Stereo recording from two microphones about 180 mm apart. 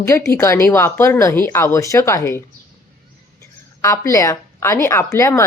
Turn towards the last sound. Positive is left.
turn(degrees=15)  # may be behind; listen again after turning